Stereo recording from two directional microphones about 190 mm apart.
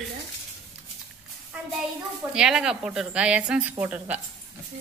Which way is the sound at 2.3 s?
5° right (ahead or behind).